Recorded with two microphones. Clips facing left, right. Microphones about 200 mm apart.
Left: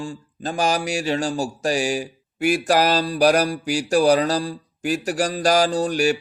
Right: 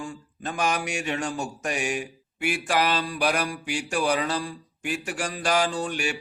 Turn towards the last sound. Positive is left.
turn(degrees=40)  # may be behind; listen again after turning